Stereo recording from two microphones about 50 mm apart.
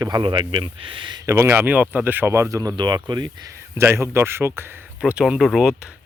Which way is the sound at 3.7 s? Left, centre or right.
Right.